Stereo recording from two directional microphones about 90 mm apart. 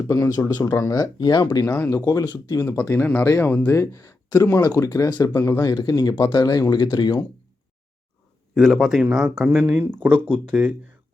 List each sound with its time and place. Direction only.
0.1 s speech: 35° left (ahead or behind)
1.6 s speech: 25° left (ahead or behind)
2.0 s speech: 50° left (ahead or behind)
2.8 s speech: 25° left (ahead or behind)
5.7 s speech: 50° left (ahead or behind)
8.5 s speech: centre (ahead or behind)